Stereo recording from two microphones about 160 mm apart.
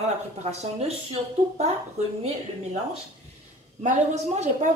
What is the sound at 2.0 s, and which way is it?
Speech, 45° right (ahead or behind).